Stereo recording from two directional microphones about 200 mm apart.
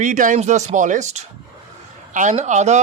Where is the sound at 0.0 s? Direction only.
40° right (ahead or behind).